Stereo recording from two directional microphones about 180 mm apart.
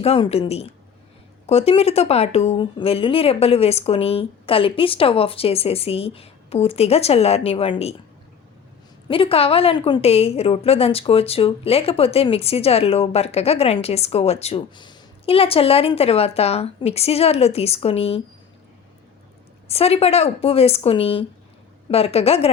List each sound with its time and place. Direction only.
0.0 s a woman's voice: 35° left (ahead or behind)
9.0 s a woman's voice: 30° left (ahead or behind)
19.6 s a woman's voice: 35° left (ahead or behind)